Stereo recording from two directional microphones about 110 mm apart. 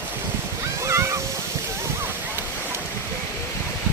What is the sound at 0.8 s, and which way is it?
Waves, 25° right (ahead or behind).